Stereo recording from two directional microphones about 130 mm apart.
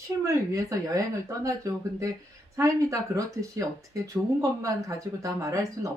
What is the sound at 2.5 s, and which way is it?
Speech, 25° right (ahead or behind).